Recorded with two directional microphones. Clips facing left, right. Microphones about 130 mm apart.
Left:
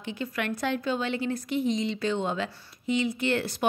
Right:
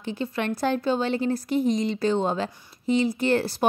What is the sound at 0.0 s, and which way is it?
A woman's voice, 35° right (ahead or behind).